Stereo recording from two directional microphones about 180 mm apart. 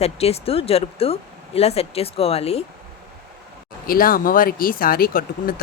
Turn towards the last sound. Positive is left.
turn(degrees=55)  # may be behind; listen again after turning